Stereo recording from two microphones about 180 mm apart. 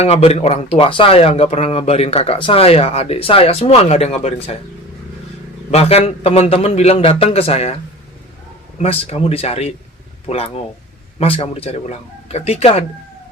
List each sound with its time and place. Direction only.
0.0 s speech: 35° left (ahead or behind)
5.7 s speech: 35° left (ahead or behind)
8.8 s speech: 35° left (ahead or behind)